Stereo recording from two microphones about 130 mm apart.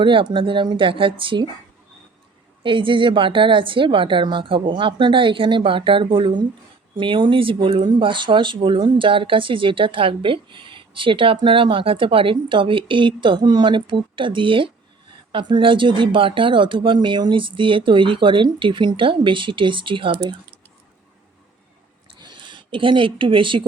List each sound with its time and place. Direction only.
0.0 s speech: 40° right (ahead or behind)
2.6 s speech: 40° right (ahead or behind)
22.2 s speech: 35° right (ahead or behind)